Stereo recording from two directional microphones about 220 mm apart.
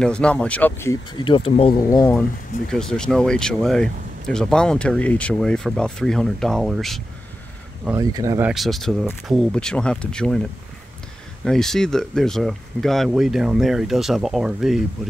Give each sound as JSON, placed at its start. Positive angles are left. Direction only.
{"t": 0.0, "sound": "speech", "side_deg": 5}
{"t": 1.2, "sound": "speech", "side_deg": 25}
{"t": 2.7, "sound": "speech", "side_deg": 5}
{"t": 7.8, "sound": "speech", "side_deg": -15}